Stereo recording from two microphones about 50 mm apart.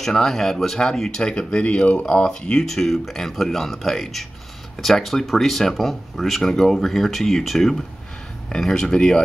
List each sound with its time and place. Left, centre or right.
0.0 s speech: centre; by 2.2 s left
2.4 s speech: centre